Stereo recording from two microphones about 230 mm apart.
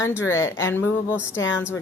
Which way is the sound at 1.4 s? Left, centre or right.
Left.